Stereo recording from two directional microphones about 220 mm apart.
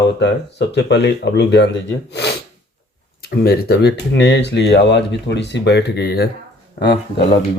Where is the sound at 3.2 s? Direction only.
45° left (ahead or behind).